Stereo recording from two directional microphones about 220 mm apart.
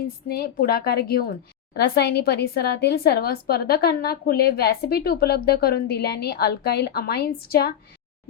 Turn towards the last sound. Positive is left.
turn(degrees=45)  # may be behind; listen again after turning